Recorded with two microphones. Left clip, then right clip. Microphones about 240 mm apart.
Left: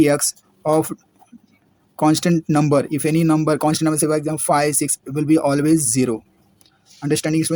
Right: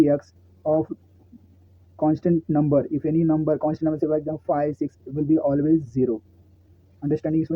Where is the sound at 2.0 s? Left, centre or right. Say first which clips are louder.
Left 4 dB; left.